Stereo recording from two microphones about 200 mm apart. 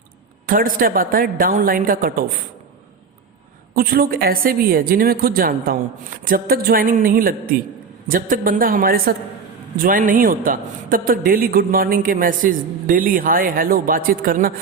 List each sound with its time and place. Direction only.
0.4 s a man's voice: 45° right (ahead or behind)
3.8 s a man's voice: 45° right (ahead or behind)